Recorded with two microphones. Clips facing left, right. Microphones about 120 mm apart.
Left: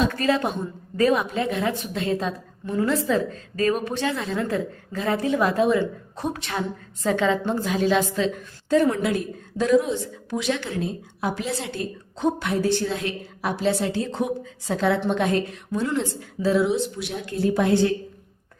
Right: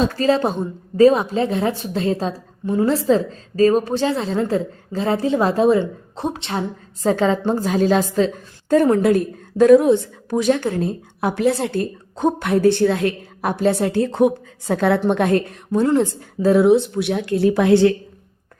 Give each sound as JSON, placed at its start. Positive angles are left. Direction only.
{"t": 0.0, "sound": "a woman's voice", "side_deg": -30}
{"t": 10.3, "sound": "a woman's voice", "side_deg": -45}